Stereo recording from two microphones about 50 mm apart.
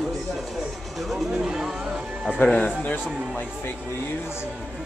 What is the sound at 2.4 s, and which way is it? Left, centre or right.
Speech, left.